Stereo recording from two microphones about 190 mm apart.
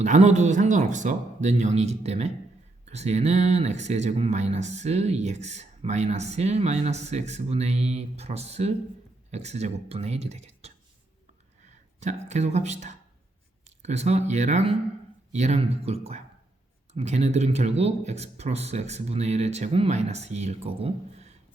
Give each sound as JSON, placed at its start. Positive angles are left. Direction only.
{"t": 0.0, "sound": "speech", "side_deg": -35}
{"t": 11.9, "sound": "speech", "side_deg": -35}